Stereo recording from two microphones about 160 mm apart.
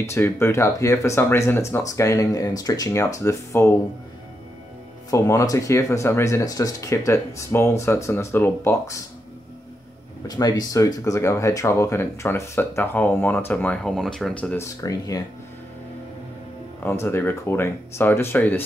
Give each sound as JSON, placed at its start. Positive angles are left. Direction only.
{"t": 0.0, "sound": "speech", "side_deg": 15}
{"t": 5.1, "sound": "speech", "side_deg": 20}
{"t": 10.2, "sound": "speech", "side_deg": 25}
{"t": 14.8, "sound": "speech", "side_deg": 20}
{"t": 16.8, "sound": "speech", "side_deg": 15}